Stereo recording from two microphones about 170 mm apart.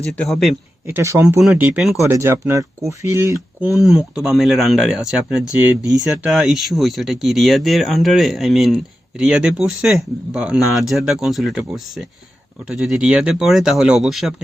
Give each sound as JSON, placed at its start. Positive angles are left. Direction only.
{"t": 0.0, "sound": "speech", "side_deg": 0}
{"t": 0.9, "sound": "speech", "side_deg": -15}
{"t": 1.4, "sound": "speech", "side_deg": -5}
{"t": 2.0, "sound": "speech", "side_deg": -15}
{"t": 3.8, "sound": "speech", "side_deg": -5}